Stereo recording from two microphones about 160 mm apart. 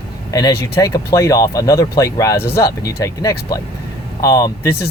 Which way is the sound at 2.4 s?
75° left (ahead or behind).